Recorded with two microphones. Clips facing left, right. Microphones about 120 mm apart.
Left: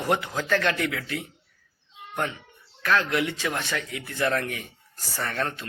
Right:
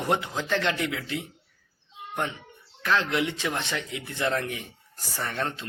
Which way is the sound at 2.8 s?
20° right (ahead or behind).